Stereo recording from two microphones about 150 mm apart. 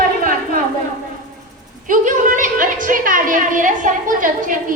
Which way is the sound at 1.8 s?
60° right (ahead or behind).